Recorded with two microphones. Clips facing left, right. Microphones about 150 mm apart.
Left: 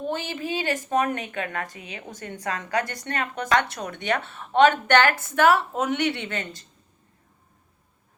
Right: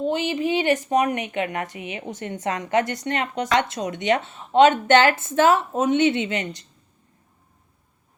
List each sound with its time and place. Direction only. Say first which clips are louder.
0.0 s a woman's voice: right 6 dB; 20° right (ahead or behind)